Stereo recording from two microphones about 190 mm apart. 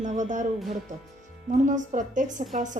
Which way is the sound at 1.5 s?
40° right (ahead or behind).